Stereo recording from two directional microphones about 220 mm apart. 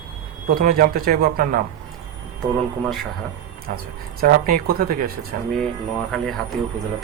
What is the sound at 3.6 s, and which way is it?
Speech, 40° right (ahead or behind).